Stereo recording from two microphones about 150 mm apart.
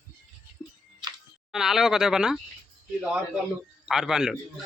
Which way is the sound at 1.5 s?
Centre (ahead or behind).